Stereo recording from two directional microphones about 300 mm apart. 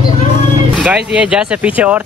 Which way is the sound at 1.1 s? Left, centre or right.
Centre.